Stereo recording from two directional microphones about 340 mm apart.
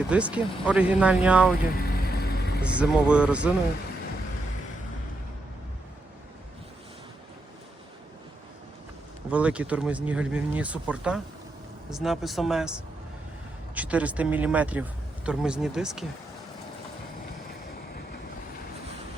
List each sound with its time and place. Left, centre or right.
0.1 s speech: centre
1.7 s vehicle: left
2.7 s speech: centre
9.3 s speech: centre
13.7 s speech: centre